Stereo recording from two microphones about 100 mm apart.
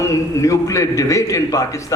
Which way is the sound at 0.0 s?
30° left (ahead or behind).